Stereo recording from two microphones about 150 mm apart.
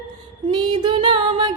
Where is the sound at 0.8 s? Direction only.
35° right (ahead or behind).